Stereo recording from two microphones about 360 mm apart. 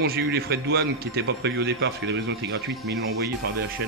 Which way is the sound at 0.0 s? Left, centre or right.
Right.